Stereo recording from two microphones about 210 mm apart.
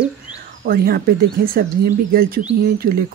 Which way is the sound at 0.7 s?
45° right (ahead or behind).